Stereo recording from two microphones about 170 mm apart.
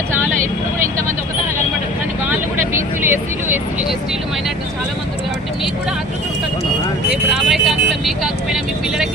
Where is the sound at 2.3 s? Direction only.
10° right (ahead or behind).